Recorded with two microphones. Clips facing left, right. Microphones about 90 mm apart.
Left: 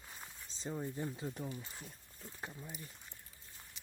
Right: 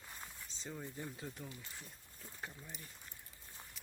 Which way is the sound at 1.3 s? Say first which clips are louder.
Left 7 dB; 35° left (ahead or behind).